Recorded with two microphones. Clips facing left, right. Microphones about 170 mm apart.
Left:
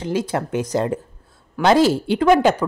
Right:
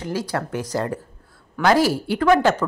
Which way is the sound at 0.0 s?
20° left (ahead or behind).